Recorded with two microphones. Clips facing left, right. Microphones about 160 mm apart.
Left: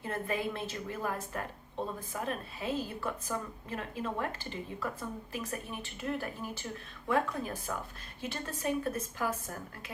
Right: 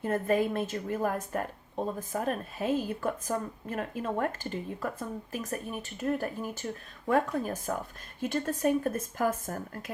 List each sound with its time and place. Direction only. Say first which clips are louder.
0.0 s a woman's voice: right 7 dB; 45° right (ahead or behind)